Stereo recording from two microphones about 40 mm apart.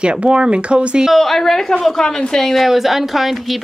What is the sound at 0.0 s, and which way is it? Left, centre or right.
Speech, right.